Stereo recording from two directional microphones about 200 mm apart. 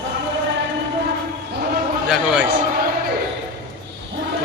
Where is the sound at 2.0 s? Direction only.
5° right (ahead or behind).